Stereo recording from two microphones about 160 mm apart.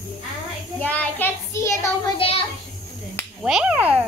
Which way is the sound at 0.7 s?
10° left (ahead or behind).